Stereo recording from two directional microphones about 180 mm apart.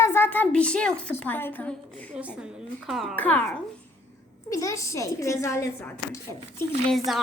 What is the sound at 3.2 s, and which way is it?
A woman's voice, 10° left (ahead or behind).